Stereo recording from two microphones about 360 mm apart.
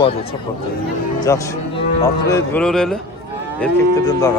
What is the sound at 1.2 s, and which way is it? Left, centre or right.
Speech, centre.